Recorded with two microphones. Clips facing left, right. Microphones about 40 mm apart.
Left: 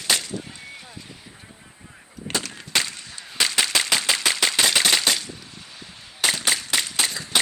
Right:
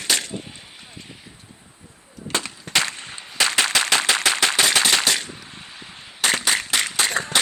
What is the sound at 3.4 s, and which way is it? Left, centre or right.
Machine gun, right.